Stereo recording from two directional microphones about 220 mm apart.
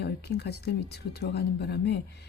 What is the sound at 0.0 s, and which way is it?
Speech, 45° left (ahead or behind).